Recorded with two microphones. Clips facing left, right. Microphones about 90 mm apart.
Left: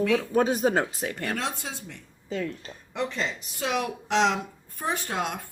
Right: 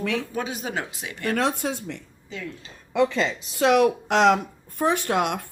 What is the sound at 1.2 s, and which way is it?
Speech, 55° right (ahead or behind).